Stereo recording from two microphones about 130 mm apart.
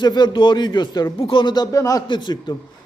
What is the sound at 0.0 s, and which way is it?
Speech, 35° left (ahead or behind).